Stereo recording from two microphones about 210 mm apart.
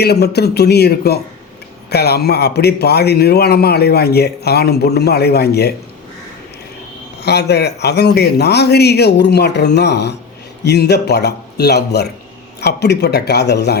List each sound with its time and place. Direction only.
0.0 s a man's voice: 50° left (ahead or behind)
7.2 s a man's voice: 50° left (ahead or behind)